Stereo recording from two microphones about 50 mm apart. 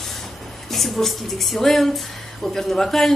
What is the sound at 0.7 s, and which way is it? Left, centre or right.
Speech, centre.